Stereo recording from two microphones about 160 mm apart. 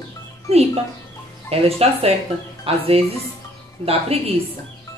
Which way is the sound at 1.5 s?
40° right (ahead or behind).